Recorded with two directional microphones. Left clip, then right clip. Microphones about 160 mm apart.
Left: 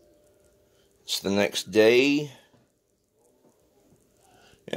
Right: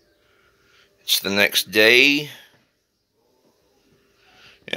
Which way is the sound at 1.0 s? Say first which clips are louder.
Right 7 dB; 15° left (ahead or behind).